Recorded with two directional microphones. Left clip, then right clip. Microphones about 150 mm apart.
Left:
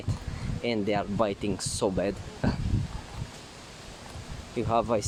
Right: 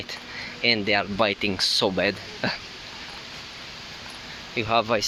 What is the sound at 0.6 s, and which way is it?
Speech, 15° left (ahead or behind).